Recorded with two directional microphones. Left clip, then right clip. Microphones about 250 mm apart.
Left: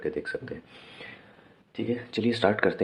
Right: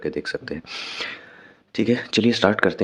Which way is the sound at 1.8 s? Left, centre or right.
Right.